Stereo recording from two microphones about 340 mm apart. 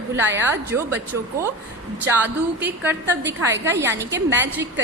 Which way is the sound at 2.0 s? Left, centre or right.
Centre.